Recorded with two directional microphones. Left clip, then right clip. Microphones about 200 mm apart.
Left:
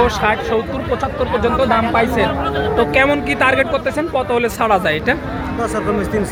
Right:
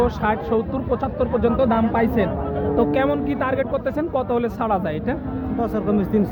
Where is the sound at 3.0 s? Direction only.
5° left (ahead or behind).